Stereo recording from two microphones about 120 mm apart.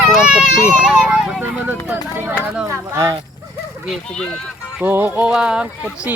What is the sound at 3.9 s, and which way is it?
Speech, 5° left (ahead or behind).